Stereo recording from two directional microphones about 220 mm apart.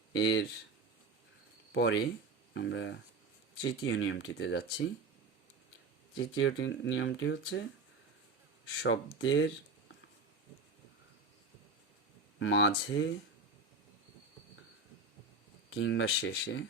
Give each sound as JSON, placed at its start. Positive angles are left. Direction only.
{"t": 0.2, "sound": "speech", "side_deg": 55}
{"t": 1.7, "sound": "speech", "side_deg": 55}
{"t": 3.6, "sound": "speech", "side_deg": 65}
{"t": 6.1, "sound": "speech", "side_deg": 60}
{"t": 8.6, "sound": "speech", "side_deg": 65}
{"t": 12.4, "sound": "speech", "side_deg": 55}
{"t": 15.7, "sound": "speech", "side_deg": 55}